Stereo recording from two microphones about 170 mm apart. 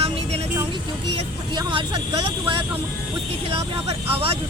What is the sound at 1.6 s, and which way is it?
Speech, 30° right (ahead or behind).